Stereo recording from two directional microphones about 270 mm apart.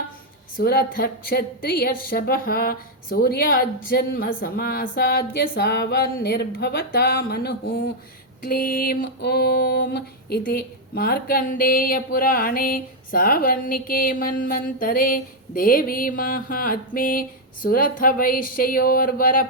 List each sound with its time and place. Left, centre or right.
0.5 s a woman's voice: left